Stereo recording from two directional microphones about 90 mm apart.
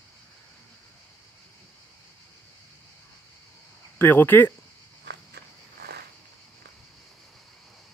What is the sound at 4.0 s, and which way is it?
Speech, 25° left (ahead or behind).